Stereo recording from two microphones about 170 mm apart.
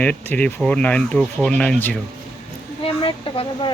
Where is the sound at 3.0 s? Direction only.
30° left (ahead or behind).